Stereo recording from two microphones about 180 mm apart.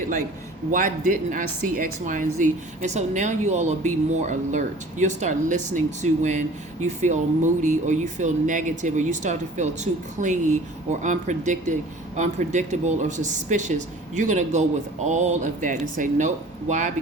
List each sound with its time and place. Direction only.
0.7 s speech: 45° right (ahead or behind)